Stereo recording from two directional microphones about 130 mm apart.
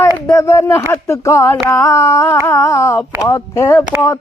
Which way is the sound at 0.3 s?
20° left (ahead or behind).